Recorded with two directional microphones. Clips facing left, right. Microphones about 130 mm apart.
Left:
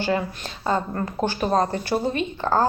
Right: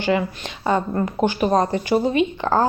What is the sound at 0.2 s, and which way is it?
Speech, 15° right (ahead or behind).